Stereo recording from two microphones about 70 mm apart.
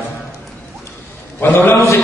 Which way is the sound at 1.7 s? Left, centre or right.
Left.